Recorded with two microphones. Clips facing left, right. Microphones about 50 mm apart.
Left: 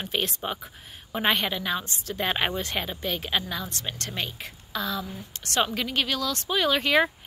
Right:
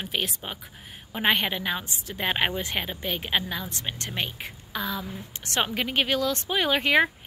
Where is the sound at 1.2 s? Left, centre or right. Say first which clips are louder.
Right 1 dB; centre.